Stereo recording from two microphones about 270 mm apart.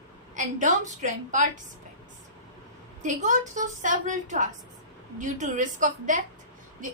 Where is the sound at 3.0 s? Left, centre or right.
Right.